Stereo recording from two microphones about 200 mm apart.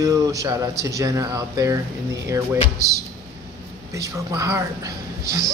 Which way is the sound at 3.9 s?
15° right (ahead or behind).